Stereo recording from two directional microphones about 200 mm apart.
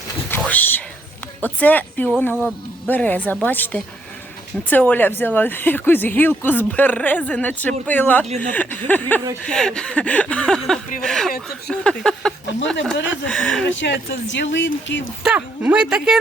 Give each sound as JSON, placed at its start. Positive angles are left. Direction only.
{"t": 0.3, "sound": "whispering", "side_deg": 10}
{"t": 1.4, "sound": "speech", "side_deg": 10}
{"t": 13.7, "sound": "speech", "side_deg": 65}
{"t": 15.2, "sound": "speech", "side_deg": -5}